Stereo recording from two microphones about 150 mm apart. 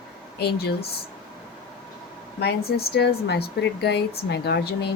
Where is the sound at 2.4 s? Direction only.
90° left.